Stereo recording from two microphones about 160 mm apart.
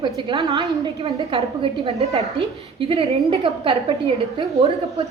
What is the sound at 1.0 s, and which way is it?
A woman's voice, 40° right (ahead or behind).